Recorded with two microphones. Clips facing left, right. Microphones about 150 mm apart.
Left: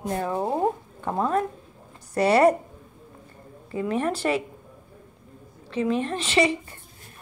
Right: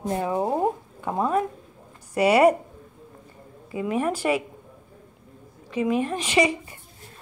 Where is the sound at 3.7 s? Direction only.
10° right (ahead or behind).